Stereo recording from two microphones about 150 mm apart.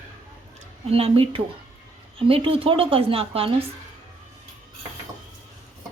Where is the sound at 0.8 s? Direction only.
40° right (ahead or behind).